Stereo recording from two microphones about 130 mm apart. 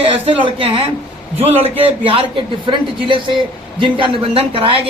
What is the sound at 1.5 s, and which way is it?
A man's voice, 50° right (ahead or behind).